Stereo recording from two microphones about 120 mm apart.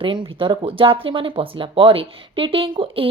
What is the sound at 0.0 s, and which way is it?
Speech, 45° right (ahead or behind).